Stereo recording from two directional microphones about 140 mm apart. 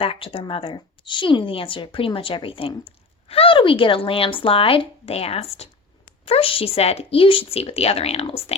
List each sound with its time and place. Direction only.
0.0 s speech: 40° left (ahead or behind)